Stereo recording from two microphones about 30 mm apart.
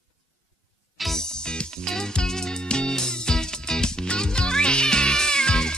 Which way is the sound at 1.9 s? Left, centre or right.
Centre.